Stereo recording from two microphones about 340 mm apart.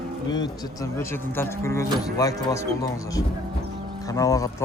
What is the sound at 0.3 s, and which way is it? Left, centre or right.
A man's voice, centre.